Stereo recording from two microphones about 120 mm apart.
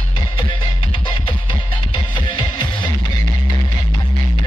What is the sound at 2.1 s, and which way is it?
Music, 40° left (ahead or behind).